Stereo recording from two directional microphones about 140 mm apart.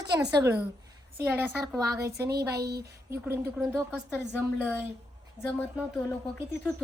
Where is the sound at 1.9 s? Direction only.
25° right (ahead or behind).